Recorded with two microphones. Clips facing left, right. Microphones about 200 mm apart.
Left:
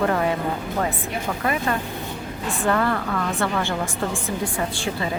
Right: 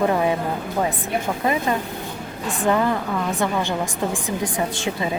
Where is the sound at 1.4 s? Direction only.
20° right (ahead or behind).